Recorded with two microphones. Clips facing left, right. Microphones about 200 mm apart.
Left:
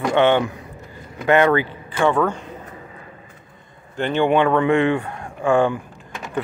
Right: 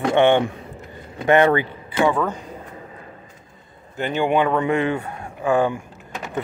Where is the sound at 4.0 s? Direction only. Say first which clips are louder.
Left 2 dB; 5° right (ahead or behind).